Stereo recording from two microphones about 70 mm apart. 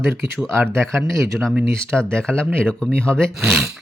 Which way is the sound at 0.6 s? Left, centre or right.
Right.